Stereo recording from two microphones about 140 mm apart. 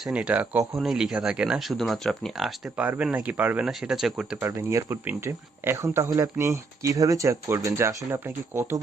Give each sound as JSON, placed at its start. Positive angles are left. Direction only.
{"t": 0.0, "sound": "speech", "side_deg": -10}
{"t": 4.4, "sound": "speech", "side_deg": -20}